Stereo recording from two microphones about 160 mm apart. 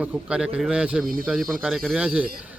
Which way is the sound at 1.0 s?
65° right (ahead or behind).